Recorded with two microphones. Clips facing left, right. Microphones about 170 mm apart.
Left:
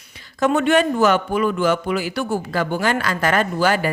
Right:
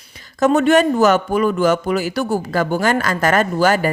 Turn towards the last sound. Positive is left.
turn(degrees=-45)  # may be behind; listen again after turning